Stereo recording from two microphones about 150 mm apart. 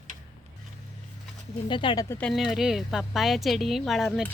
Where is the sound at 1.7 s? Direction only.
30° left (ahead or behind).